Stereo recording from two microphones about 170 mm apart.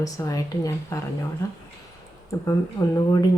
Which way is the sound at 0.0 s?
20° left (ahead or behind).